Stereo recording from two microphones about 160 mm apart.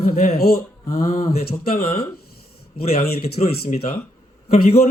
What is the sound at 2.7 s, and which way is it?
A man's voice, 70° left (ahead or behind).